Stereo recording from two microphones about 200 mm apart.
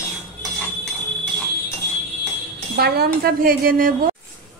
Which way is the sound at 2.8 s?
50° right (ahead or behind).